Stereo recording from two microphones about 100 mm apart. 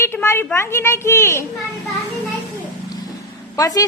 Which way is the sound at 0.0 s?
25° left (ahead or behind).